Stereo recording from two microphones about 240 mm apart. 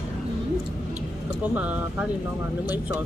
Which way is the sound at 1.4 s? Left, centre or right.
Centre.